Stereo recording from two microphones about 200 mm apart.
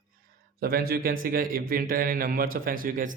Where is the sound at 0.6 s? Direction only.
45° right (ahead or behind).